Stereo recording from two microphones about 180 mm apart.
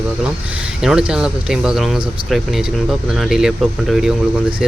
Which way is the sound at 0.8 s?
5° right (ahead or behind).